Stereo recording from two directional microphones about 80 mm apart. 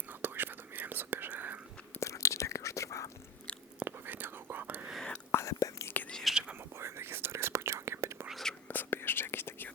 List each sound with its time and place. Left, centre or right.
0.1 s whispering: right
2.0 s whispering: left
3.8 s whispering: right
4.9 s whispering: centre
5.3 s whispering: left
6.3 s whispering: centre
6.7 s whispering: right
8.3 s whispering: centre
8.6 s whispering: left